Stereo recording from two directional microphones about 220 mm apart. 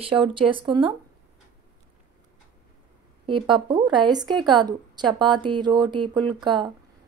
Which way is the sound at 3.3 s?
20° right (ahead or behind).